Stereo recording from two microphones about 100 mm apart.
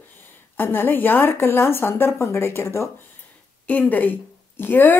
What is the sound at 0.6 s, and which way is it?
A woman's voice, 20° left (ahead or behind).